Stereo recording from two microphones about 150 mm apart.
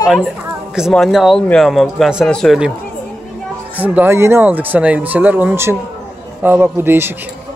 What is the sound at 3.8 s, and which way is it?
Speech, 15° right (ahead or behind).